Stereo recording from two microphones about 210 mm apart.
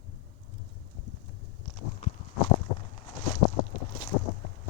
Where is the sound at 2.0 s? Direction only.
40° left (ahead or behind).